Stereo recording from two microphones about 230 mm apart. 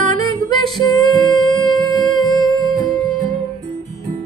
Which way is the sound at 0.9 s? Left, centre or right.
Centre.